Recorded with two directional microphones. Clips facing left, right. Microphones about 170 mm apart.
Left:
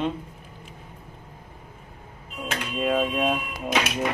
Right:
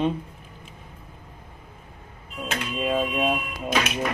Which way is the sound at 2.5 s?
5° right (ahead or behind).